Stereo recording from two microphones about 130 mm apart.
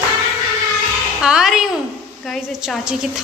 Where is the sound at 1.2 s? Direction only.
5° right (ahead or behind).